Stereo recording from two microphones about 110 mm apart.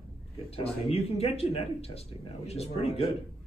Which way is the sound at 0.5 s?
65° left (ahead or behind).